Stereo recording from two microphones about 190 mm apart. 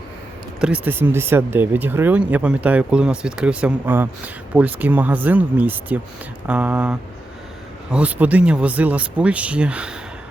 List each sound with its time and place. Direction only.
0.6 s speech: 10° right (ahead or behind)